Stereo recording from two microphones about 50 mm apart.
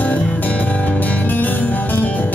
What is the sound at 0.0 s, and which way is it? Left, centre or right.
Music, left.